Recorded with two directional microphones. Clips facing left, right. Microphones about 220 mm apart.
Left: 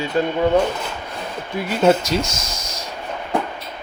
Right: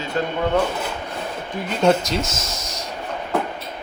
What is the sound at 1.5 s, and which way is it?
Speech, 5° left (ahead or behind).